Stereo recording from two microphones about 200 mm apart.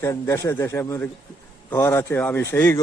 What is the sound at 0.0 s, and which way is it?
A man's voice, 15° left (ahead or behind).